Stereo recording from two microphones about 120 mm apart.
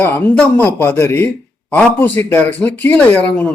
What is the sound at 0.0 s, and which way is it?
A man's voice, 15° left (ahead or behind).